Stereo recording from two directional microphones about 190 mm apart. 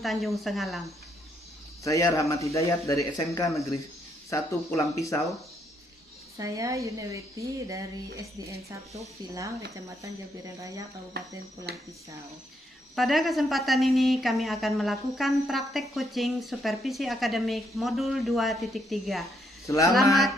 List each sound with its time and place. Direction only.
0.0 s a woman's voice: centre (ahead or behind)
1.8 s speech: 15° left (ahead or behind)
6.3 s speech: 15° right (ahead or behind)
11.1 s speech: 60° right (ahead or behind)
13.0 s a woman's voice: centre (ahead or behind)
19.6 s speech: 15° left (ahead or behind)